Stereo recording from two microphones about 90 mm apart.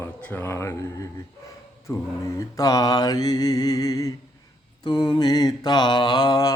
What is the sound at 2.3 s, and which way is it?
Mantra, 40° left (ahead or behind).